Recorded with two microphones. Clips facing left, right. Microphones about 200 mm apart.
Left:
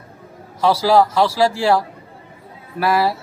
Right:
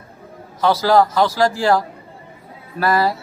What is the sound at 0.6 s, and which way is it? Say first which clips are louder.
Speech: even; 10° left (ahead or behind).